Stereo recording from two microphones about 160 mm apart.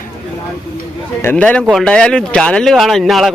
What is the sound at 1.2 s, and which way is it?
A man's voice, 10° left (ahead or behind).